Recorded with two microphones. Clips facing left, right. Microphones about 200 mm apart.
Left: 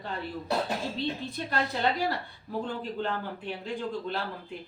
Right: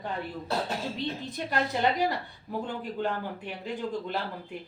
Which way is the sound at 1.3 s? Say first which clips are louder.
Right 1 dB; 15° right (ahead or behind).